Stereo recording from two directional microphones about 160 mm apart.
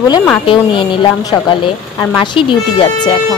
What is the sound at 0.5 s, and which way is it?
Speech, 30° left (ahead or behind).